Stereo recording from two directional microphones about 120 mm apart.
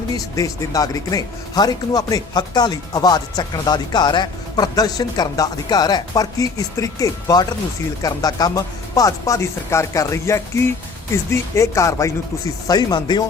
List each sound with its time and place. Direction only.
0.3 s speech: 30° left (ahead or behind)